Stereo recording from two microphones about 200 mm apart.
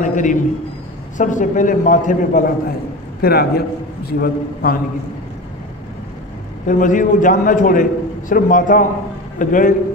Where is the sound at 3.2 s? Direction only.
50° left (ahead or behind).